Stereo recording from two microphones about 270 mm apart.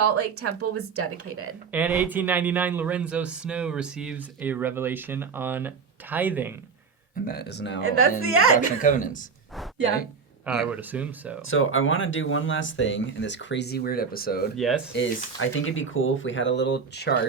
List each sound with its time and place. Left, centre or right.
0.0 s speech: right
1.7 s speech: centre
7.3 s speech: left
7.8 s a woman's voice: right
8.8 s speech: left
10.4 s speech: centre
11.4 s speech: left
14.5 s speech: centre
14.9 s speech: left